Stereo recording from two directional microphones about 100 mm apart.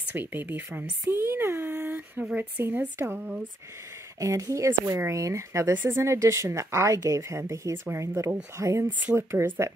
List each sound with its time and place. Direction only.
0.1 s speech: 20° right (ahead or behind)
4.2 s speech: 30° right (ahead or behind)